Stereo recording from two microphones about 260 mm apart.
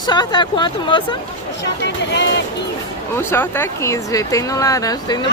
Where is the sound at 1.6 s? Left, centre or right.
Left.